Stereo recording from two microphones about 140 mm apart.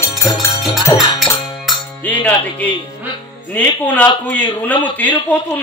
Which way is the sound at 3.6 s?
10° left (ahead or behind).